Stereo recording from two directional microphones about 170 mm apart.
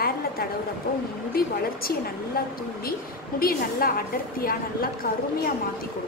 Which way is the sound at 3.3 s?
60° left (ahead or behind).